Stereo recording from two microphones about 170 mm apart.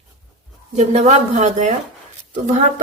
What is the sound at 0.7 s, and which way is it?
A woman's voice, 40° right (ahead or behind).